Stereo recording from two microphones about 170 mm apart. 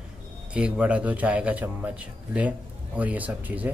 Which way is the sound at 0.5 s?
5° right (ahead or behind).